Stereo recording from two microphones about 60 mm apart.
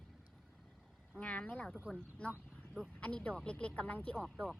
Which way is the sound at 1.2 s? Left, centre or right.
Centre.